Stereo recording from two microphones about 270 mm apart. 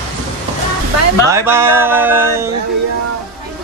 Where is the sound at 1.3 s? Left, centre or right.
Centre.